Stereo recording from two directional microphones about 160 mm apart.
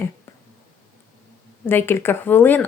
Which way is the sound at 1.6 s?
15° left (ahead or behind).